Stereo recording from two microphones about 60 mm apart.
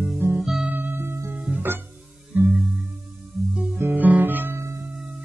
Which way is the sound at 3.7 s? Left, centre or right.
Right.